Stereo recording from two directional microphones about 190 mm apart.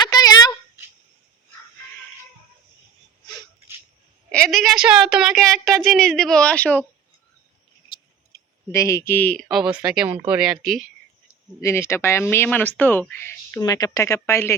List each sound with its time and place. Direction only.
0.0 s a sound: 20° left (ahead or behind)
4.3 s a woman's voice: 5° left (ahead or behind)
7.9 s speech: 20° left (ahead or behind); by 10.8 s centre (ahead or behind)
11.6 s speech: 15° left (ahead or behind)